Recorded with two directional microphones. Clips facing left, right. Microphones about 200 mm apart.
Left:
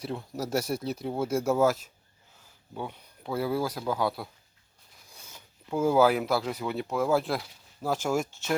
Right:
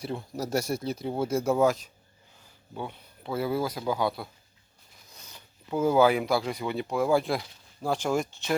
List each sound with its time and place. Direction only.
0.0 s speech: centre (ahead or behind)